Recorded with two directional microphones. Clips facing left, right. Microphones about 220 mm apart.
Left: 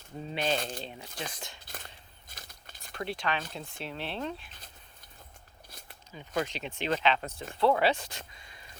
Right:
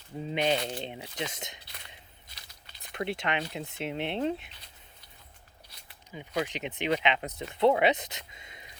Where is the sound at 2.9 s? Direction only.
25° right (ahead or behind).